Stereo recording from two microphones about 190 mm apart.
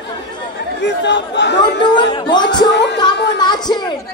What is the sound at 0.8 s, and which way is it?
Speech, 65° left (ahead or behind).